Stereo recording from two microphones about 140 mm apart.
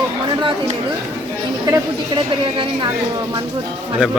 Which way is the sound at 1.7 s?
35° right (ahead or behind).